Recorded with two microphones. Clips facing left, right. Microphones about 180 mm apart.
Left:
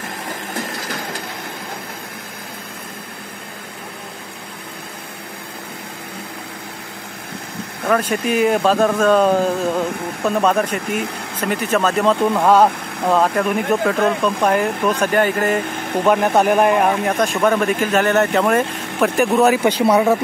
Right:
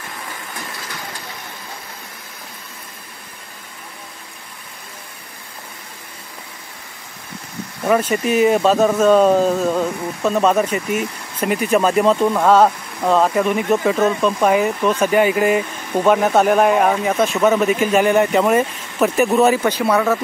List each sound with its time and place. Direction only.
7.8 s speech: 10° right (ahead or behind)
10.9 s speech: 55° left (ahead or behind)
11.3 s speech: 10° right (ahead or behind)
19.6 s speech: 15° left (ahead or behind)